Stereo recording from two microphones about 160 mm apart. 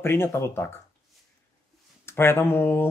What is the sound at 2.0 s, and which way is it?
Speech, 15° left (ahead or behind).